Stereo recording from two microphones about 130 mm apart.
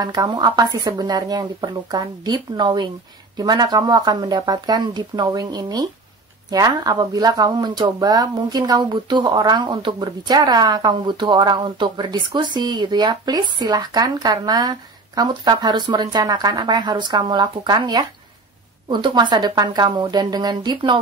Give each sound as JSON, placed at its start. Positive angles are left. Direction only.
{"t": 0.0, "sound": "speech", "side_deg": -30}